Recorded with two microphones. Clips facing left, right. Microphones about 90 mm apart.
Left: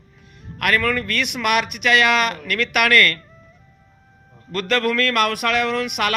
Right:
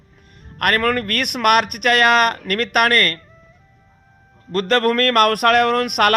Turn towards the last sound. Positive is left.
turn(degrees=-50)  # may be behind; listen again after turning